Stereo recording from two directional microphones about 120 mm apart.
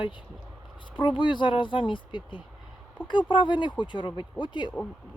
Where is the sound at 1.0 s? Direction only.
40° left (ahead or behind).